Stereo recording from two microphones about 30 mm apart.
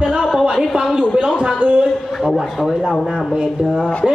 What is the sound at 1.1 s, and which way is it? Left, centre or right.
Speech, right.